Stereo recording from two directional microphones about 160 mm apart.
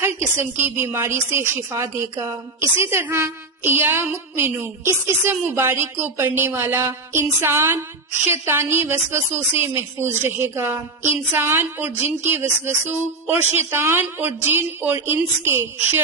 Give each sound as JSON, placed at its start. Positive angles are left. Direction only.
{"t": 0.6, "sound": "a woman's voice", "side_deg": -15}